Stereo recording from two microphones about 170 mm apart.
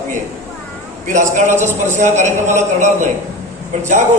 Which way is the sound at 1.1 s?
50° right (ahead or behind).